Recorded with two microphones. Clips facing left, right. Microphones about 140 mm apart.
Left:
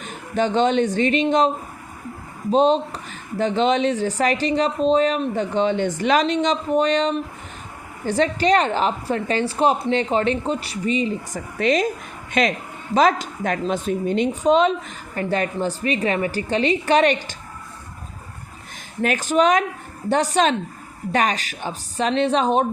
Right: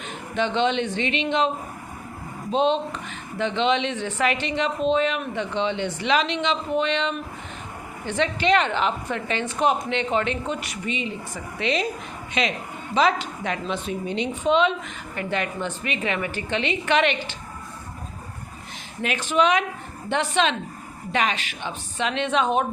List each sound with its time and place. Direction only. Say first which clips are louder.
0.1 s speech: left 4 dB; 40° left (ahead or behind)
2.5 s a woman's voice: left 5 dB; 40° left (ahead or behind)
19.0 s a woman's voice: left 3 dB; 45° left (ahead or behind)